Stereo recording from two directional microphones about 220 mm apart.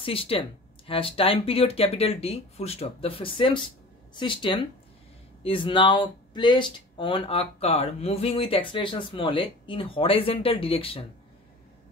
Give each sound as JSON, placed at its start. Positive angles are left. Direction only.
{"t": 0.0, "sound": "speech", "side_deg": 25}